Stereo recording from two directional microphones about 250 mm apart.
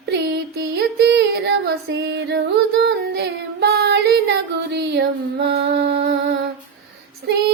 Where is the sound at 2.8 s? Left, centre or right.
Right.